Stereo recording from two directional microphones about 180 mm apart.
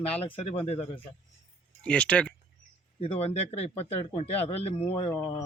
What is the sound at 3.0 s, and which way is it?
Speech, 35° left (ahead or behind).